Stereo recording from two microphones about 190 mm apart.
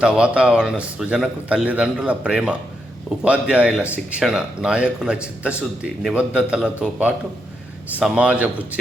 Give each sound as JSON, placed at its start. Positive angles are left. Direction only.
{"t": 0.0, "sound": "a man's voice", "side_deg": -5}
{"t": 7.9, "sound": "a man's voice", "side_deg": -5}